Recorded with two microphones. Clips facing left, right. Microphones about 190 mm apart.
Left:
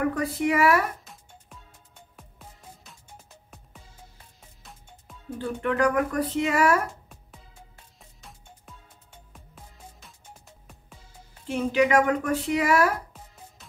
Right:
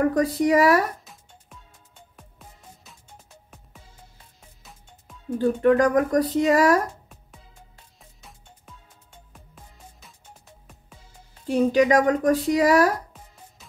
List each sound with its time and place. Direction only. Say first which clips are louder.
0.1 s speech: right 6 dB; 35° right (ahead or behind)
2.1 s music: left 1 dB; centre (ahead or behind)
5.4 s speech: right 6 dB; 40° right (ahead or behind)
8.0 s music: even; centre (ahead or behind)
11.4 s speech: right 4 dB; 35° right (ahead or behind)